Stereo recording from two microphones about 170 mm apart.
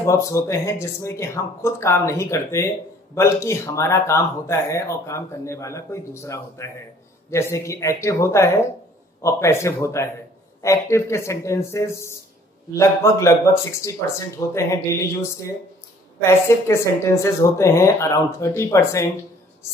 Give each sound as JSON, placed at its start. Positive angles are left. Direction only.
{"t": 0.0, "sound": "speech", "side_deg": 15}